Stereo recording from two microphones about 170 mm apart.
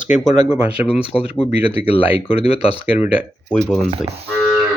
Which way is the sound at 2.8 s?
10° right (ahead or behind).